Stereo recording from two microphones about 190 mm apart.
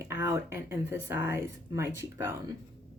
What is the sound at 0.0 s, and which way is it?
Speech, 15° right (ahead or behind).